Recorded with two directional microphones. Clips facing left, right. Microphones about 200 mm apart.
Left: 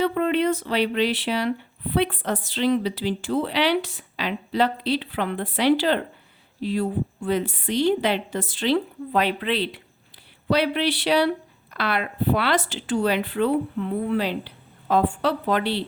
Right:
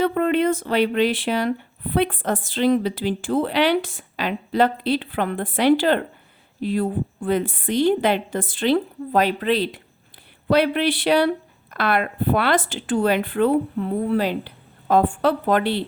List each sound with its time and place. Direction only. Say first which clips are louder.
0.0 s speech: right 2 dB; 50° right (ahead or behind)